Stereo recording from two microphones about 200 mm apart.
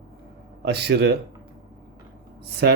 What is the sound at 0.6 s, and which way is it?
Speech, 55° right (ahead or behind).